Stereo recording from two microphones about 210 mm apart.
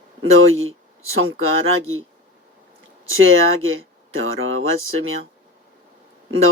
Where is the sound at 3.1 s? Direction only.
75° right (ahead or behind).